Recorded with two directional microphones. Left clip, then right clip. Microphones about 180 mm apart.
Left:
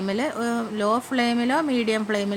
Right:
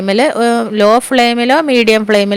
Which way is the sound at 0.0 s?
45° right (ahead or behind).